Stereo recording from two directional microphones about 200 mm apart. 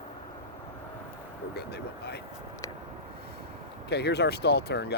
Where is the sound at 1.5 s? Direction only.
55° left (ahead or behind).